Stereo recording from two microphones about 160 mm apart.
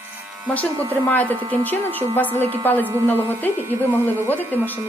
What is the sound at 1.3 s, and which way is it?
Speech, 30° right (ahead or behind).